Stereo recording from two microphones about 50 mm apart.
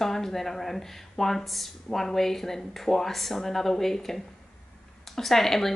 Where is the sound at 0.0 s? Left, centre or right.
Centre.